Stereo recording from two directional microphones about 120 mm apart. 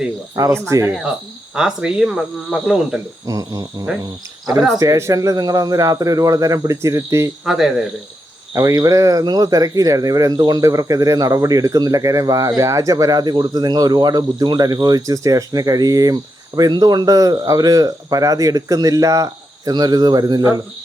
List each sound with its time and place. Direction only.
0.3 s speech: 30° right (ahead or behind)
1.5 s speech: 5° right (ahead or behind)
3.2 s speech: 30° right (ahead or behind)
7.4 s speech: 5° right (ahead or behind)
8.5 s speech: 30° right (ahead or behind)